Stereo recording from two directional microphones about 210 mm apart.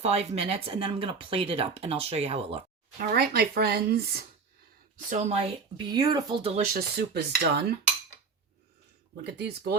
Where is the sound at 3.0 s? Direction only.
45° right (ahead or behind).